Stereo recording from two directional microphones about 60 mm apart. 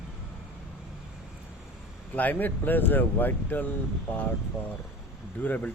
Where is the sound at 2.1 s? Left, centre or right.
Left.